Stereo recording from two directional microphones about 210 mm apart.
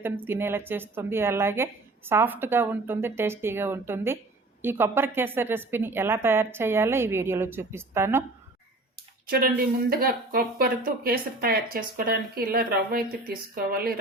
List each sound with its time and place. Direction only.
0.3 s a woman's voice: 10° right (ahead or behind)
9.2 s speech: 45° right (ahead or behind)